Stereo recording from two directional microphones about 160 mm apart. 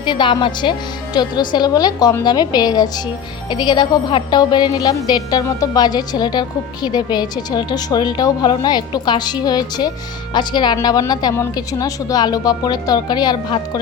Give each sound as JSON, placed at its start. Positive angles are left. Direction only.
{"t": 0.0, "sound": "a woman's voice", "side_deg": 30}